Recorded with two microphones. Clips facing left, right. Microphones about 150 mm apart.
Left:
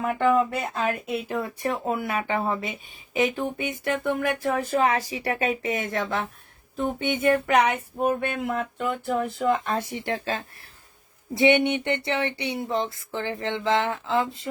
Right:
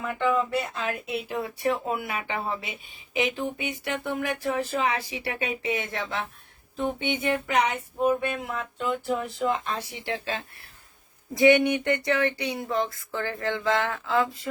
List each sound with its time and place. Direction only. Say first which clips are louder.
0.0 s speech: left 4 dB; 50° left (ahead or behind)
11.3 s speech: right 1 dB; 25° left (ahead or behind)